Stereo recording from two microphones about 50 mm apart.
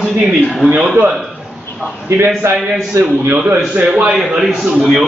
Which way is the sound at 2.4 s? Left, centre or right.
Right.